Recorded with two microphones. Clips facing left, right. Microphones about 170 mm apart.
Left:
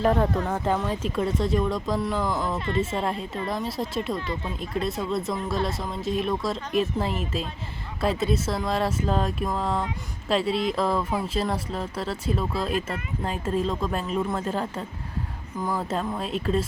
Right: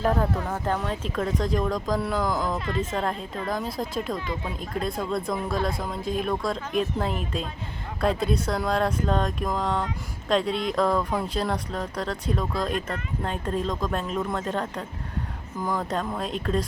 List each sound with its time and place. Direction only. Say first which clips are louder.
0.0 s speech: left 2 dB; centre (ahead or behind)
0.4 s speech: left 2 dB; 10° left (ahead or behind)